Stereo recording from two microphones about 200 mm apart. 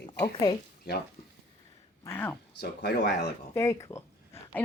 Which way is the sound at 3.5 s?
15° left (ahead or behind).